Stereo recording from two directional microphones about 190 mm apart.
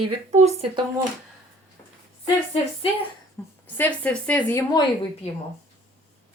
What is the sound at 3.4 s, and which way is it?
A woman's voice, 15° left (ahead or behind).